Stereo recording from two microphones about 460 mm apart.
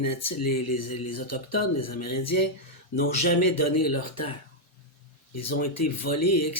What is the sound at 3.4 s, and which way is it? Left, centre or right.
Speech, left.